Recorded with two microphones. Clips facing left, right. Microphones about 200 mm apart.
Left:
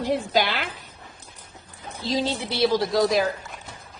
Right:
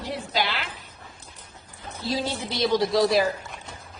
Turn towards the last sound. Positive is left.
turn(degrees=0)  # may be behind; listen again after turning